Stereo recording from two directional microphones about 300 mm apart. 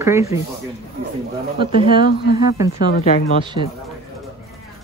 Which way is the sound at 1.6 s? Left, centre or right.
Centre.